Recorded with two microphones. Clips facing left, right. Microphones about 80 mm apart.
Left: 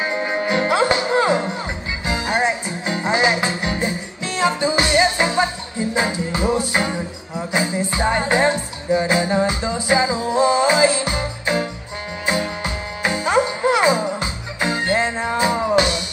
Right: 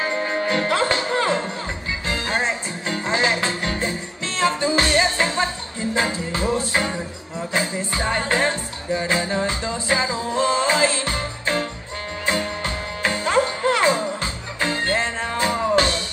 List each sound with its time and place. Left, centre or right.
0.0 s speech: centre
2.0 s music: centre